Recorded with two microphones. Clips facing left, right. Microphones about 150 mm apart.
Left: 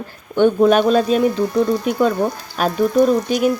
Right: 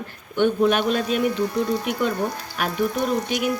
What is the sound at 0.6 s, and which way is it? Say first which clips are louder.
Speech: left 7 dB; 35° left (ahead or behind).